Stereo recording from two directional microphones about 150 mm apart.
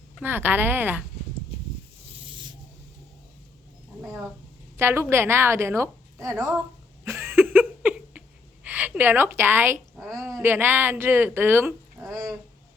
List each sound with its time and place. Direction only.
0.2 s a woman's voice: 15° right (ahead or behind)
4.8 s a woman's voice: 15° right (ahead or behind)
7.0 s a sound: 15° right (ahead or behind)
8.6 s a woman's voice: 10° right (ahead or behind)
10.0 s a sound: 20° right (ahead or behind)
10.4 s a woman's voice: 15° right (ahead or behind)